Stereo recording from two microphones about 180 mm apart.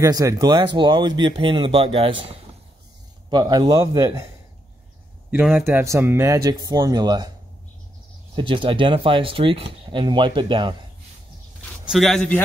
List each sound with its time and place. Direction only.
0.0 s speech: 20° right (ahead or behind)
5.3 s speech: 5° right (ahead or behind); by 7.2 s 20° right (ahead or behind)
8.4 s speech: 30° right (ahead or behind)
11.9 s speech: centre (ahead or behind)